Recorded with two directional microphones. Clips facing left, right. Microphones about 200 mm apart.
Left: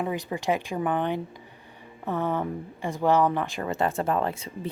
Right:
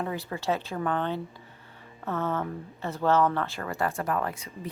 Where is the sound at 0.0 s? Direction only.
15° left (ahead or behind).